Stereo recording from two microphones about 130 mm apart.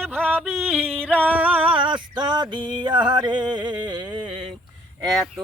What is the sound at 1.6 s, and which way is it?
Music, 40° right (ahead or behind).